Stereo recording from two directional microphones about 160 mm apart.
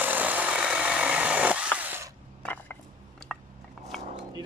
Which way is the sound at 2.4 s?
10° left (ahead or behind).